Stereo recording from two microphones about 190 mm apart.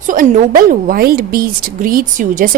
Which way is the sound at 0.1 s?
45° right (ahead or behind).